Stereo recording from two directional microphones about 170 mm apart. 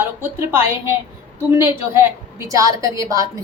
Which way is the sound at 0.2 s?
15° right (ahead or behind).